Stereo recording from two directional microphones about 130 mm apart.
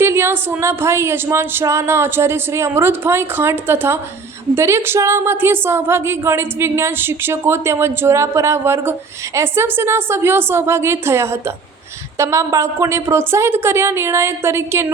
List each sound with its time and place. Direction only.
0.0 s a woman's voice: 20° right (ahead or behind)